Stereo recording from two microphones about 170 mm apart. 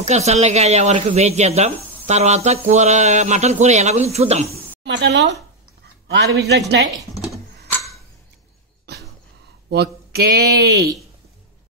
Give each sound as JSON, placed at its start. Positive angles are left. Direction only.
{"t": 0.0, "sound": "speech", "side_deg": -40}
{"t": 4.8, "sound": "speech", "side_deg": -90}
{"t": 6.0, "sound": "speech", "side_deg": -80}
{"t": 9.7, "sound": "speech", "side_deg": -65}